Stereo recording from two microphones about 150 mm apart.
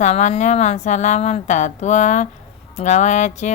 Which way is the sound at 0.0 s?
50° left (ahead or behind).